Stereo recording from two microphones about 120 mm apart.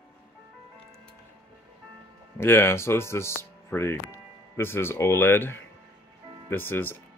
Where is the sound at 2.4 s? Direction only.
20° left (ahead or behind).